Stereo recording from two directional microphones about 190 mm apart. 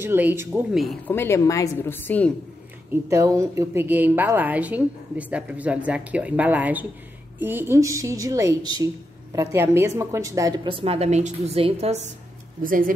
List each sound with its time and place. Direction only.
0.0 s a woman's voice: 10° right (ahead or behind)
1.1 s a woman's voice: 15° left (ahead or behind)
2.9 s a woman's voice: 15° right (ahead or behind); by 12.0 s 30° right (ahead or behind)
12.6 s a woman's voice: 45° right (ahead or behind)